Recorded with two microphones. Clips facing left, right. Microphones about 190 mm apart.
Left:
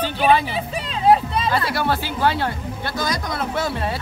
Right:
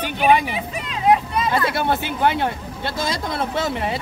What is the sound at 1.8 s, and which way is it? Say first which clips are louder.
Speech: right 1 dB; 20° right (ahead or behind).